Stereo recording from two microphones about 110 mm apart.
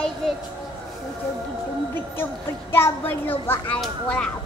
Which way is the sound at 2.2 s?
20° left (ahead or behind).